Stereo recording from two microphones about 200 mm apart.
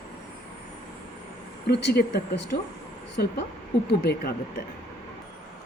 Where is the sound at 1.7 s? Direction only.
55° left (ahead or behind).